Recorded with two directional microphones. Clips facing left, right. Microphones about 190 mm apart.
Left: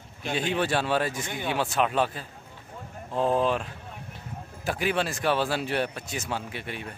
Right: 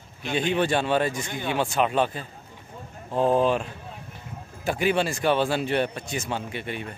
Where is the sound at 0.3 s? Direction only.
5° left (ahead or behind).